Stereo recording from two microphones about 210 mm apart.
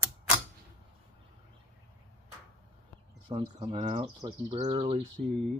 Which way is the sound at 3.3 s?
20° right (ahead or behind).